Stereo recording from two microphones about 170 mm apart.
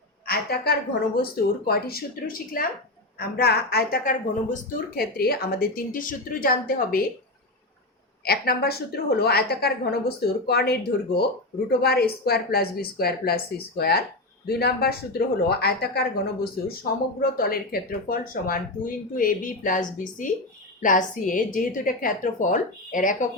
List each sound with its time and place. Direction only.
0.3 s speech: 65° left (ahead or behind)
3.2 s speech: 65° left (ahead or behind); by 5.0 s 50° left (ahead or behind)
5.1 s speech: 65° left (ahead or behind)
8.2 s a woman's voice: 65° left (ahead or behind); by 19.8 s 50° left (ahead or behind)
20.8 s a woman's voice: 50° left (ahead or behind)